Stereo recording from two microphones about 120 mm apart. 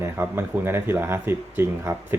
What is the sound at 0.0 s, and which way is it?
Speech, 15° right (ahead or behind).